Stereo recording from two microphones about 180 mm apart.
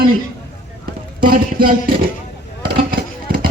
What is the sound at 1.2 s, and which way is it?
Speech, 55° right (ahead or behind).